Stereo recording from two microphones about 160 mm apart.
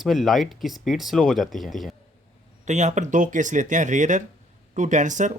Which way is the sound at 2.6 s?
45° right (ahead or behind).